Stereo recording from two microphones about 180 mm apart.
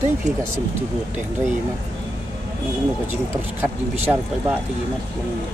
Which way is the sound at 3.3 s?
10° right (ahead or behind).